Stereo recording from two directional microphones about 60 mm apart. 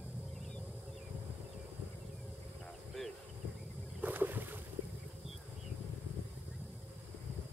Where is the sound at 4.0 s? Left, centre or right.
Right.